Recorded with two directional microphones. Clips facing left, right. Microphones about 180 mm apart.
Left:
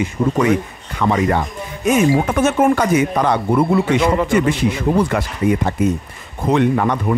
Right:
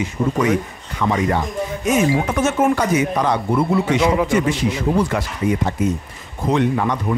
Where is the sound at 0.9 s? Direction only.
60° left (ahead or behind).